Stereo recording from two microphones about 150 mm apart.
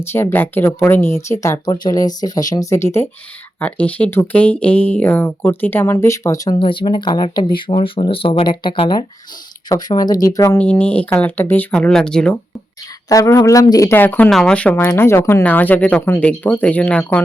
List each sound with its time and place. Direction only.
0.1 s speech: 15° left (ahead or behind)
10.6 s speech: 10° left (ahead or behind)
13.1 s speech: 20° left (ahead or behind)